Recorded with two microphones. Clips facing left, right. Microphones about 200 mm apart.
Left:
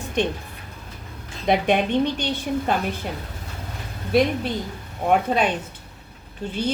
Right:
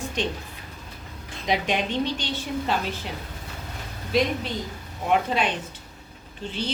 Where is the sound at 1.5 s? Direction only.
55° left (ahead or behind).